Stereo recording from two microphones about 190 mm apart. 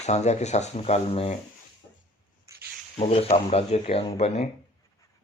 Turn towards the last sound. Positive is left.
turn(degrees=35)  # may be behind; listen again after turning